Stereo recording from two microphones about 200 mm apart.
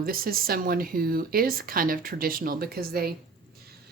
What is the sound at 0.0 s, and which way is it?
A woman's voice, 45° right (ahead or behind).